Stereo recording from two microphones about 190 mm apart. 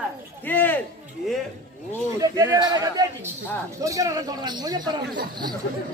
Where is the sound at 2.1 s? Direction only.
15° right (ahead or behind).